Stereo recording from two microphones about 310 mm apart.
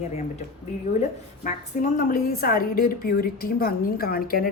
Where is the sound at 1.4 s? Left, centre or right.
Left.